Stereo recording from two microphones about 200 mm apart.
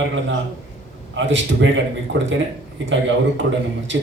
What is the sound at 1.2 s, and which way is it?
A man's voice, 65° right (ahead or behind).